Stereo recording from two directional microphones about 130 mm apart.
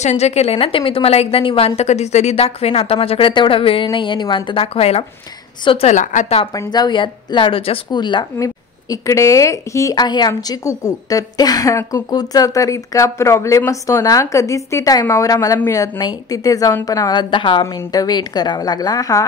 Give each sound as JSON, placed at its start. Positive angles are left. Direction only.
{"t": 0.0, "sound": "speech", "side_deg": 55}
{"t": 1.8, "sound": "speech", "side_deg": 60}
{"t": 6.5, "sound": "speech", "side_deg": 30}
{"t": 17.6, "sound": "speech", "side_deg": 25}